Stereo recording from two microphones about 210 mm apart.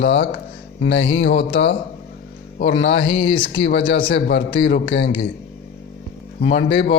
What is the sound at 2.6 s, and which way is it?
Speech, 60° left (ahead or behind).